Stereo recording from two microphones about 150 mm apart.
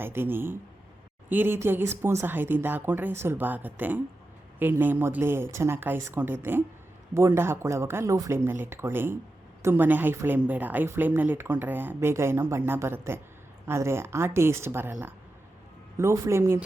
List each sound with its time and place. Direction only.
0.0 s a woman's voice: 15° right (ahead or behind)